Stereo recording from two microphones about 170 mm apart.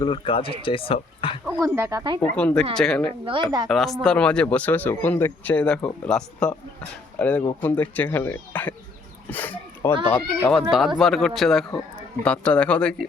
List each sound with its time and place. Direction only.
0.0 s speech: 30° left (ahead or behind)
1.6 s speech: 15° right (ahead or behind)
2.3 s speech: 5° left (ahead or behind)
3.2 s a woman's voice: 25° right (ahead or behind)
3.7 s speech: centre (ahead or behind)